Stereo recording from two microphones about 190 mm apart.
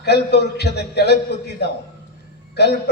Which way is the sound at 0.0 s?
60° left (ahead or behind).